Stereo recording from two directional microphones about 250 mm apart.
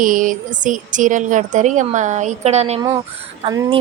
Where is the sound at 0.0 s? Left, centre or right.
Right.